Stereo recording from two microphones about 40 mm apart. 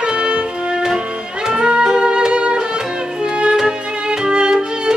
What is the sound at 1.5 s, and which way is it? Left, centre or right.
Music, centre.